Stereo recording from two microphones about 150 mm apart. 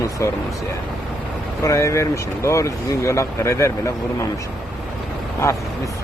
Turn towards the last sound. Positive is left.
turn(degrees=20)  # may be behind; listen again after turning